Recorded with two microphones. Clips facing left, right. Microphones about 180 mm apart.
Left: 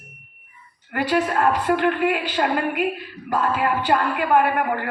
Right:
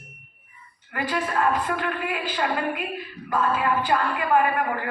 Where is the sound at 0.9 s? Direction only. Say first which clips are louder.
Left 5 dB; 65° left (ahead or behind).